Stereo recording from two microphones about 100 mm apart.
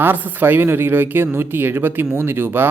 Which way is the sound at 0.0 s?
20° right (ahead or behind).